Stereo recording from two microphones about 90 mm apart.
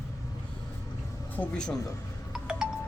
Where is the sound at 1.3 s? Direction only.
15° left (ahead or behind).